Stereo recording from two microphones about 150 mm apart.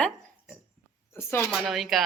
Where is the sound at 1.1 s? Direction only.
15° left (ahead or behind).